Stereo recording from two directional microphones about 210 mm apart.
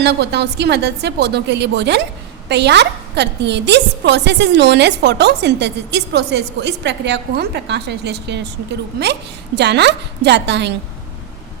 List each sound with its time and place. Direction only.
0.0 s a woman's voice: 55° right (ahead or behind)
9.6 s a woman's voice: 55° right (ahead or behind)